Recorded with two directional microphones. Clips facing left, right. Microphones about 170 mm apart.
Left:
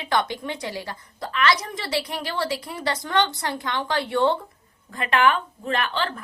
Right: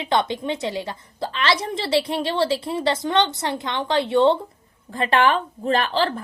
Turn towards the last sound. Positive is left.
turn(degrees=-35)  # may be behind; listen again after turning